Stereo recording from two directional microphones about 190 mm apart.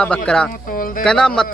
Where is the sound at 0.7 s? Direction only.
45° left (ahead or behind).